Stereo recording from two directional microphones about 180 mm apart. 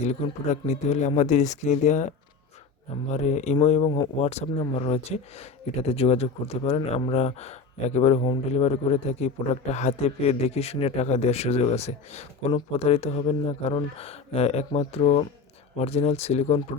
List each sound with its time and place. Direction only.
0.0 s a man's voice: 40° left (ahead or behind)